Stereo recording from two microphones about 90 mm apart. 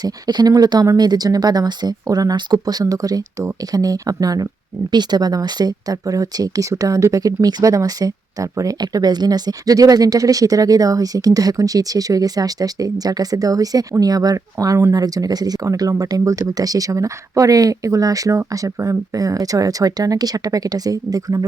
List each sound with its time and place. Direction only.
0.0 s speech: 50° right (ahead or behind)